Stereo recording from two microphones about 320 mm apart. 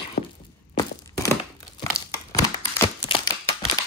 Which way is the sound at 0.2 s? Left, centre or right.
Left.